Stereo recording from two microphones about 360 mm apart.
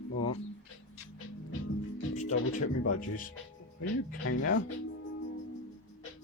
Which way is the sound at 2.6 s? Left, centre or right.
Left.